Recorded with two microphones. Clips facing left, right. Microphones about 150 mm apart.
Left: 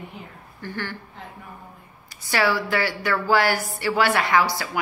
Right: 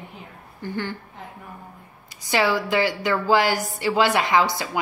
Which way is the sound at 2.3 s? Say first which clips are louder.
Right 1 dB; 20° right (ahead or behind).